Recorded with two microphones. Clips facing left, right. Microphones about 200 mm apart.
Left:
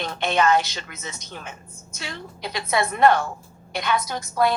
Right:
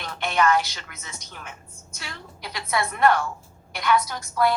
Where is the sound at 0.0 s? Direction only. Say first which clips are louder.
Left 2 dB; 20° left (ahead or behind).